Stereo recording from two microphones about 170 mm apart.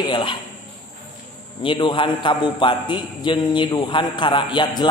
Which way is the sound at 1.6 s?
30° left (ahead or behind).